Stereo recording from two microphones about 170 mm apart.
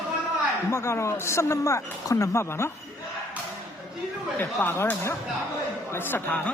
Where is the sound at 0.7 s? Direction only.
15° left (ahead or behind).